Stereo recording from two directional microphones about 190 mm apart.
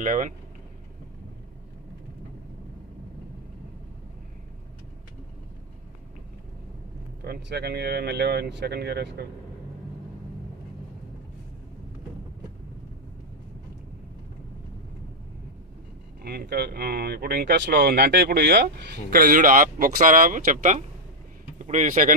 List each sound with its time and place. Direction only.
0.0 s speech: 45° right (ahead or behind)
7.2 s speech: 60° right (ahead or behind)
16.2 s speech: 55° right (ahead or behind)
19.1 s speech: 45° right (ahead or behind)